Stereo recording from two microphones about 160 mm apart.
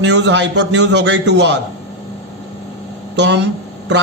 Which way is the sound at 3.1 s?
90° right.